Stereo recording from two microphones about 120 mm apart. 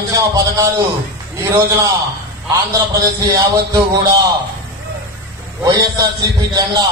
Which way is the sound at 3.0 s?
30° right (ahead or behind).